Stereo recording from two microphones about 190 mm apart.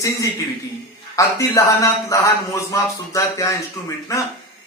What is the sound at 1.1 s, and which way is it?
A man's voice, 15° left (ahead or behind).